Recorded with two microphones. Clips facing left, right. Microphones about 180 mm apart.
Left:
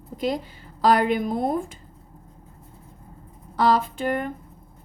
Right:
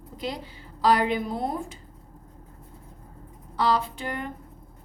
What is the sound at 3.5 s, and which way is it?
Speech, 50° left (ahead or behind).